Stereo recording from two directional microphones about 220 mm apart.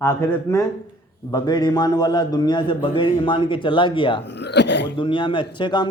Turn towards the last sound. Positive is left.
turn(degrees=20)  # may be behind; listen again after turning